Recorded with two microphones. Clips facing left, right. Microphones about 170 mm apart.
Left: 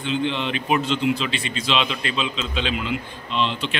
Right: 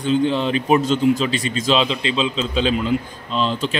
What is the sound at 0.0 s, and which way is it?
A man's voice, 40° right (ahead or behind).